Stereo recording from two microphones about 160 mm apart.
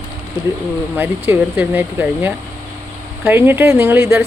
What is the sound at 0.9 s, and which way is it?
Speech, 10° right (ahead or behind).